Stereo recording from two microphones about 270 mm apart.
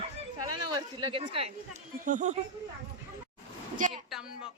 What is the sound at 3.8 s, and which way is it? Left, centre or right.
Speech, right.